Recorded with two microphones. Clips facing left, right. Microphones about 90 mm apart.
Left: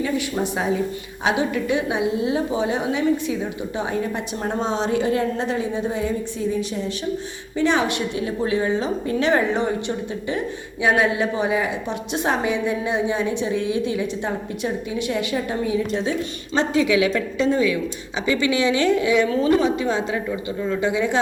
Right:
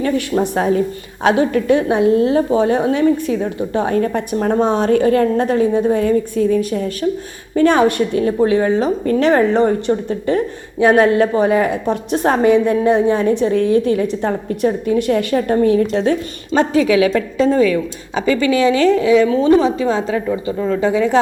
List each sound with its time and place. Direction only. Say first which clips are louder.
0.5 s a woman's voice: right 6 dB; 50° right (ahead or behind)
16.9 s a woman's voice: right 5 dB; 35° right (ahead or behind)